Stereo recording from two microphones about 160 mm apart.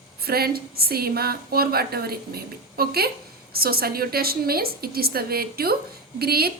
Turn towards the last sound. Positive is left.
turn(degrees=-75)  # may be behind; listen again after turning